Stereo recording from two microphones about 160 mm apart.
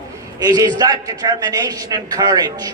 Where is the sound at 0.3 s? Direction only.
25° right (ahead or behind).